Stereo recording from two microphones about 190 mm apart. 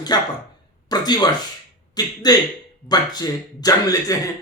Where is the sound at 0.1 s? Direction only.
20° left (ahead or behind).